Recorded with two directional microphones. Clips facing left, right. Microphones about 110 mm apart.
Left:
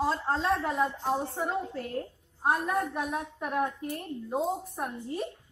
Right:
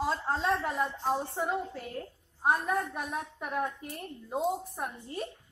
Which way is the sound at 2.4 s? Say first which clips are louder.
Left 1 dB; centre (ahead or behind).